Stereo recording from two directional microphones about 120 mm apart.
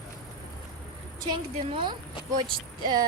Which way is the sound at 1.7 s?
45° right (ahead or behind).